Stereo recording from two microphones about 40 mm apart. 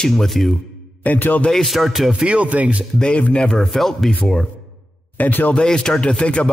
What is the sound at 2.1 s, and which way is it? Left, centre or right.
Speech, right.